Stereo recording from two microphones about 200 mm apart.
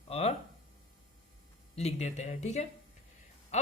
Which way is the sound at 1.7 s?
35° left (ahead or behind).